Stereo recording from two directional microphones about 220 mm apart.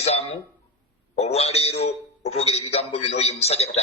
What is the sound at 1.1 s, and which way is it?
A man's voice, 30° left (ahead or behind).